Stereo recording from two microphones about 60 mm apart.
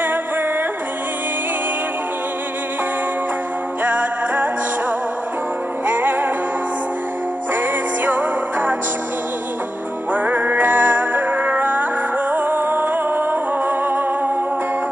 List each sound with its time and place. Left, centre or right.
3.8 s music: right
5.9 s music: right
7.5 s music: right
10.1 s music: right